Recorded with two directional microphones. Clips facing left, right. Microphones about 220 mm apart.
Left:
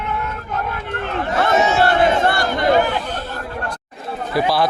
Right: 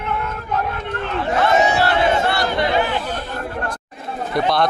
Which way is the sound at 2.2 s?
50° left (ahead or behind).